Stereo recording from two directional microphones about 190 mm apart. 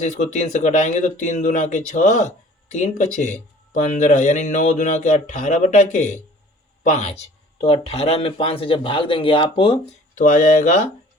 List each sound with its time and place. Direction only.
0.0 s speech: 40° left (ahead or behind)
10.2 s speech: 40° left (ahead or behind)